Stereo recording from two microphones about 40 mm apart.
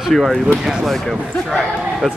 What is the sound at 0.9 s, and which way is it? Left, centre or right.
A man's voice, centre.